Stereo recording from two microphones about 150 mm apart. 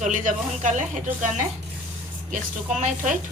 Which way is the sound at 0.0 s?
55° right (ahead or behind).